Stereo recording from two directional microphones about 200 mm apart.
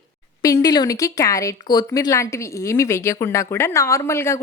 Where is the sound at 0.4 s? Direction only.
15° left (ahead or behind).